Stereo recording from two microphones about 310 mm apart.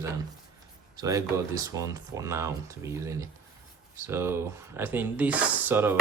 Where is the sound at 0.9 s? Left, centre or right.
Centre.